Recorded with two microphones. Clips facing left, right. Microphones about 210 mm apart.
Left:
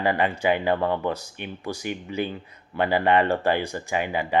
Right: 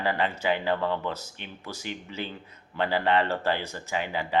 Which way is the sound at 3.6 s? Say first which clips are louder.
Left 5 dB; 15° left (ahead or behind).